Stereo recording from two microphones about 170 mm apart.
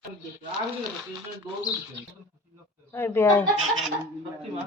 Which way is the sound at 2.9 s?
15° left (ahead or behind).